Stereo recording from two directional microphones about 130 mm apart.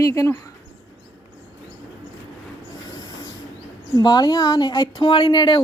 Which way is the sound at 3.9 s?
30° left (ahead or behind).